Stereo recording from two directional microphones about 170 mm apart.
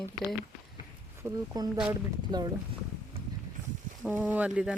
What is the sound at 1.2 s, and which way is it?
Speech, 20° right (ahead or behind).